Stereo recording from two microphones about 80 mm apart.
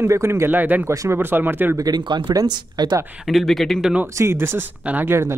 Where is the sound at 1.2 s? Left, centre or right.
Right.